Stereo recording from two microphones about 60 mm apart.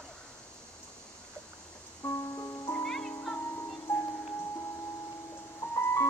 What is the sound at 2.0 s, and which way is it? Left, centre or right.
Music, left.